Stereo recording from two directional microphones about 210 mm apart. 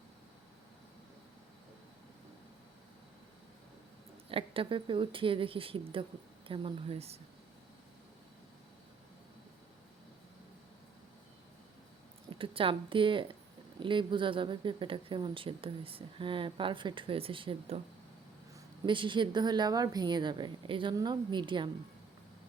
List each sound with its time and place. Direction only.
4.3 s a woman's voice: 25° right (ahead or behind)
12.4 s a woman's voice: 25° right (ahead or behind)
18.9 s a woman's voice: 25° right (ahead or behind)